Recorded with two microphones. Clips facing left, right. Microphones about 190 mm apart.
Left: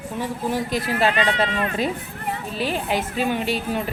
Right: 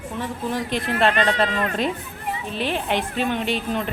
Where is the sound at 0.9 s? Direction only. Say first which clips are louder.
Right 1 dB; 5° left (ahead or behind).